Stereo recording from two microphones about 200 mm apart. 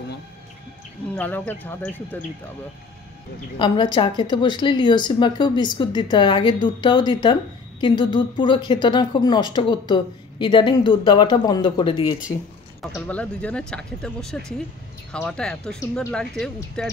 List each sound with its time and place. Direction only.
1.1 s speech: 10° left (ahead or behind)
3.5 s a woman's voice: 25° left (ahead or behind)
12.9 s speech: 5° left (ahead or behind)